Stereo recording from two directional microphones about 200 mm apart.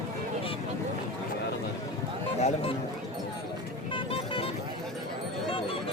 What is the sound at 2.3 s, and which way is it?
Speech, 35° left (ahead or behind).